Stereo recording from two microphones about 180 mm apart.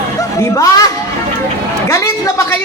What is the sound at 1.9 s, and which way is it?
Speech, 15° left (ahead or behind).